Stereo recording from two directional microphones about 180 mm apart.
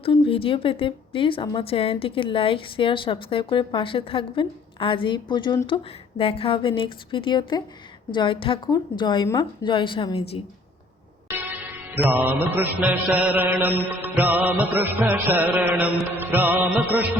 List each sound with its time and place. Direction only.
0.0 s a woman's voice: 30° left (ahead or behind)
12.1 s mantra: 10° right (ahead or behind)